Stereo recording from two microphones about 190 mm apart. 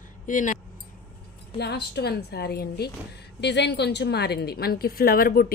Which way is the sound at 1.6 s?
60° left (ahead or behind).